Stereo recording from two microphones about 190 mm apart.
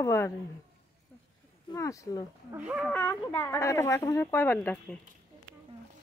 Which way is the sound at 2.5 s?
5° right (ahead or behind).